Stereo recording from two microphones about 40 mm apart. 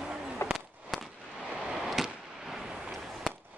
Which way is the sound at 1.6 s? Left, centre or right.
Centre.